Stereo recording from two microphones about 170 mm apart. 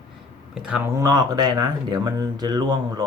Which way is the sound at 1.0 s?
20° right (ahead or behind).